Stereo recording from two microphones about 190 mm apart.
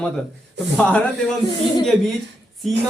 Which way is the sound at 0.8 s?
5° left (ahead or behind).